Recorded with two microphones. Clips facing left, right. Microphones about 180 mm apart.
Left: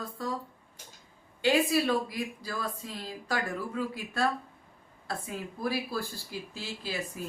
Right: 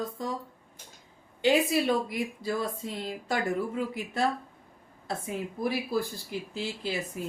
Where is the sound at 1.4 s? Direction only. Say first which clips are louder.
Right 1 dB; 20° right (ahead or behind).